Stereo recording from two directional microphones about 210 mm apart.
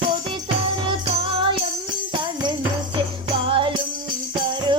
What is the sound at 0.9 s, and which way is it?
Music, 25° right (ahead or behind).